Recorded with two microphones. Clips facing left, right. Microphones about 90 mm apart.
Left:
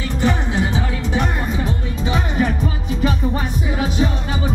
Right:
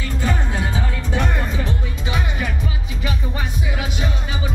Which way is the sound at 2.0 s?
35° left (ahead or behind).